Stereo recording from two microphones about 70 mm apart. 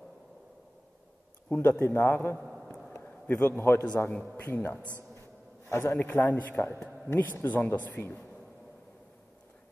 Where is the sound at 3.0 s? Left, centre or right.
Left.